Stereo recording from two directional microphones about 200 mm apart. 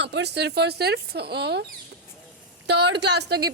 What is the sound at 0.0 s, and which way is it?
Speech, 60° right (ahead or behind).